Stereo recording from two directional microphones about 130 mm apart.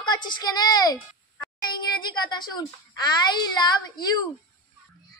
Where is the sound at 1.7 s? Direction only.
35° left (ahead or behind).